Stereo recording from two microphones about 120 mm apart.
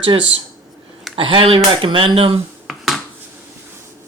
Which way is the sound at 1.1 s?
45° right (ahead or behind).